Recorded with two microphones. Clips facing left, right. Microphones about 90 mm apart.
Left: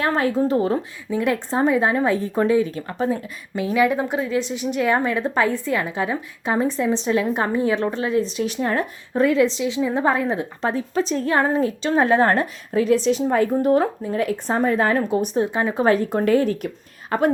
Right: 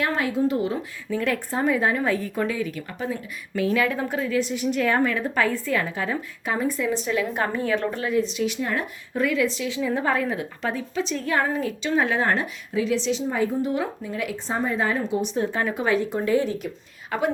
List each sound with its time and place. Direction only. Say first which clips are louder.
0.0 s a woman's voice: left 3 dB; 35° left (ahead or behind)
1.1 s a woman's voice: left 4 dB; 20° left (ahead or behind); by 3.2 s 35° left (ahead or behind)
3.5 s a woman's voice: left 3 dB; 20° left (ahead or behind)
8.2 s a woman's voice: left 2 dB; 40° left (ahead or behind)
13.2 s speech: left 6 dB; 60° left (ahead or behind)
15.4 s a woman's voice: left 3 dB; 20° left (ahead or behind)
15.7 s speech: left 6 dB; 45° left (ahead or behind)
16.1 s speech: left 4 dB; 60° left (ahead or behind)
17.1 s a woman's voice: left 5 dB; 45° left (ahead or behind)